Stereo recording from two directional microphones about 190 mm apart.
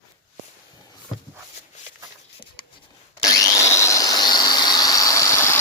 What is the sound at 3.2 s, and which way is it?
Vacuum cleaner, 20° left (ahead or behind).